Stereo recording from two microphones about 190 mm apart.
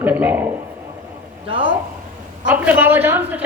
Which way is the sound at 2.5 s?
10° right (ahead or behind).